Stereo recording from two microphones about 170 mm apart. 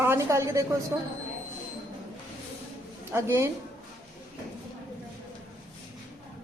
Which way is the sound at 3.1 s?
15° right (ahead or behind).